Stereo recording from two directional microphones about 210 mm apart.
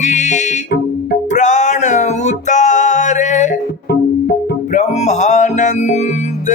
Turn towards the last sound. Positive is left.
turn(degrees=30)  # may be behind; listen again after turning